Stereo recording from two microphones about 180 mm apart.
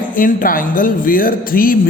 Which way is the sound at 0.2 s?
50° left (ahead or behind).